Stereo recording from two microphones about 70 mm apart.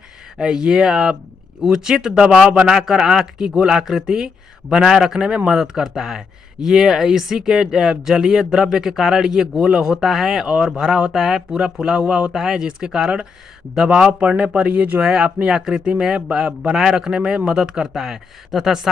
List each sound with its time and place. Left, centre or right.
0.4 s speech: centre